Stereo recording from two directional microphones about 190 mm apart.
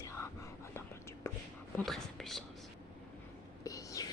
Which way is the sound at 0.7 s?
15° left (ahead or behind).